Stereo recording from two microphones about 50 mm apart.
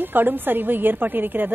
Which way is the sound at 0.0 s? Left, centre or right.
Right.